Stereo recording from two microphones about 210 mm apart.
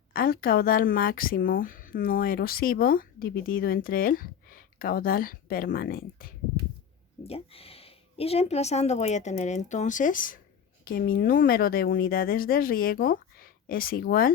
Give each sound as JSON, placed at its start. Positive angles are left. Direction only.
{"t": 0.1, "sound": "a woman's voice", "side_deg": 45}
{"t": 7.3, "sound": "a woman's voice", "side_deg": 30}